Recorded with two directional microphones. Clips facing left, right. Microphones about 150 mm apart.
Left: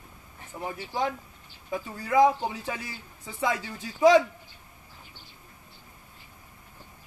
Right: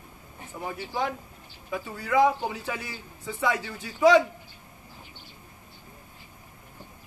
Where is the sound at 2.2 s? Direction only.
20° left (ahead or behind).